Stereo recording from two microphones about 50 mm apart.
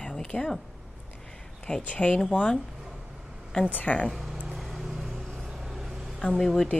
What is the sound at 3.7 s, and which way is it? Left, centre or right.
Speech, left.